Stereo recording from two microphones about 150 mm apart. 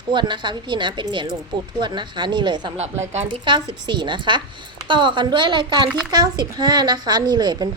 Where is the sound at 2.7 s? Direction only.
45° right (ahead or behind).